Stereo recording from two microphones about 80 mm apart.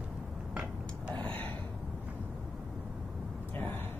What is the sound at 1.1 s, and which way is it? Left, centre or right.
Gasp, left.